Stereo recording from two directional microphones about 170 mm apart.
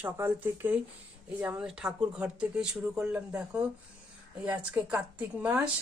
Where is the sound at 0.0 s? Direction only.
10° right (ahead or behind).